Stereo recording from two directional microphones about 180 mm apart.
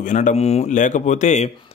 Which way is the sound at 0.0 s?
45° left (ahead or behind).